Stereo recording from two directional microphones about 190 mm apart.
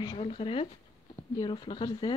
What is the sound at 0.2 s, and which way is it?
Speech, 30° left (ahead or behind).